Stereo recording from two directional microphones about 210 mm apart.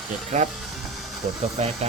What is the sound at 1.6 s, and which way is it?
Speech, 30° right (ahead or behind).